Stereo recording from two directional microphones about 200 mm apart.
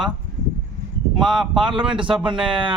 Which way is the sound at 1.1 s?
Centre (ahead or behind).